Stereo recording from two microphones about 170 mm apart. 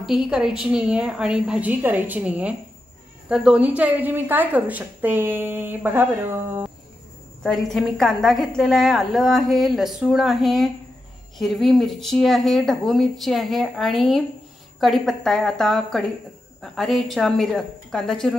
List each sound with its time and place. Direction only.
0.3 s a woman's voice: 5° right (ahead or behind)
7.4 s speech: centre (ahead or behind)